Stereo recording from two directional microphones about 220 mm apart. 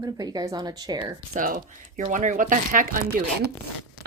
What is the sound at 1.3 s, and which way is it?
Speech, 35° right (ahead or behind).